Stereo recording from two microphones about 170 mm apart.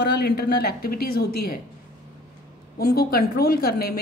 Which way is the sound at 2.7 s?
65° left (ahead or behind).